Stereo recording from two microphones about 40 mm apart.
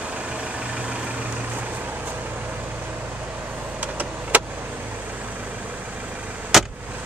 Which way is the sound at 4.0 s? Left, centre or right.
Right.